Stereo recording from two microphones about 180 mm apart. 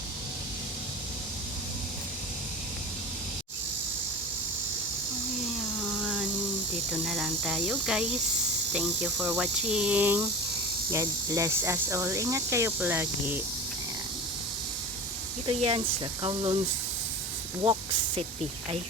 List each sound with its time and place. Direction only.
6.0 s a sound: 5° right (ahead or behind)
6.9 s speech: centre (ahead or behind)
15.4 s speech: 30° right (ahead or behind)